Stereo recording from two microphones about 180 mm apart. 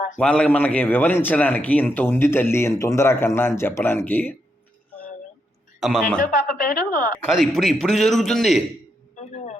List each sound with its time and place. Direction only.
0.2 s a man's voice: 5° left (ahead or behind)
5.8 s a man's voice: 5° left (ahead or behind)
6.5 s a woman's voice: 50° left (ahead or behind)
7.1 s a man's voice: centre (ahead or behind)
9.1 s music: 40° left (ahead or behind)